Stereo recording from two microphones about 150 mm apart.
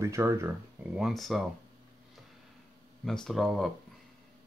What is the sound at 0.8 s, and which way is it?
Speech, 5° right (ahead or behind).